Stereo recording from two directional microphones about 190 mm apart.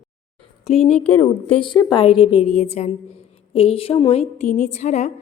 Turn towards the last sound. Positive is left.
turn(degrees=40)  # may be behind; listen again after turning